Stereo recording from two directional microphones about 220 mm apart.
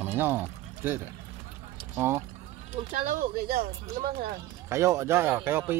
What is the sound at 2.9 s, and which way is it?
Speech, 40° right (ahead or behind).